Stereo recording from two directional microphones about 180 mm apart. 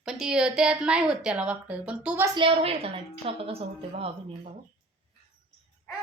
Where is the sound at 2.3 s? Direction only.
30° right (ahead or behind).